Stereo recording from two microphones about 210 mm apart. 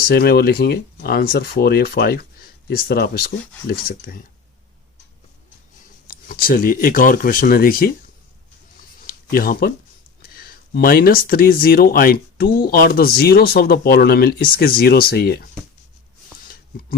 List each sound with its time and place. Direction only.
0.1 s speech: 50° left (ahead or behind)
6.1 s speech: 45° left (ahead or behind)
9.0 s a sound: 45° left (ahead or behind)
10.2 s speech: 45° left (ahead or behind)